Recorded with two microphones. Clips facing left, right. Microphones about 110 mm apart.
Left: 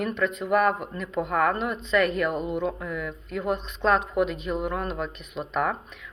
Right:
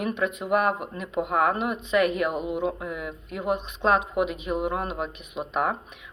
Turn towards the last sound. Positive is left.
turn(degrees=-10)  # may be behind; listen again after turning